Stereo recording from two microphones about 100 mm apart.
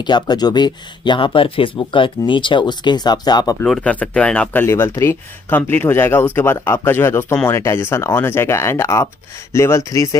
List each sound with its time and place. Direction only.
0.0 s speech: 45° left (ahead or behind)
3.6 s speech: 5° left (ahead or behind)
4.6 s speech: 25° left (ahead or behind)